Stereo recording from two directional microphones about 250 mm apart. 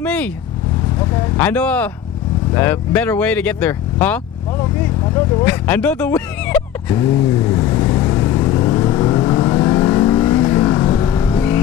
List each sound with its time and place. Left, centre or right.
0.0 s speech: centre
5.4 s speech: centre
7.2 s vehicle: centre